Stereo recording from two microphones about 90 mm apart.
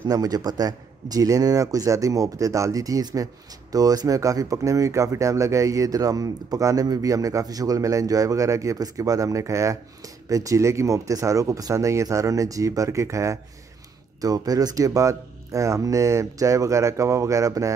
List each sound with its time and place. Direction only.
0.1 s speech: 45° right (ahead or behind)